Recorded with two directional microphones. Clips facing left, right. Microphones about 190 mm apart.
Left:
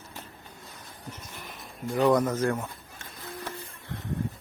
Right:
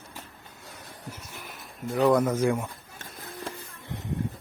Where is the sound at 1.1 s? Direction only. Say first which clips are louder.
Left 1 dB; 10° right (ahead or behind).